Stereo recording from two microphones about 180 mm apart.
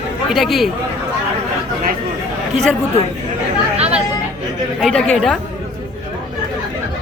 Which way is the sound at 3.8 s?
35° right (ahead or behind).